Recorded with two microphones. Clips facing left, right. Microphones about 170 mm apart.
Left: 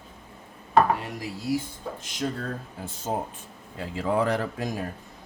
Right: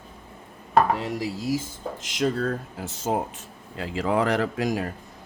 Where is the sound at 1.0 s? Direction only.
90° right.